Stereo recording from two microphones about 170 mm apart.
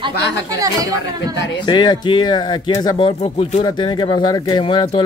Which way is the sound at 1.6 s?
25° left (ahead or behind).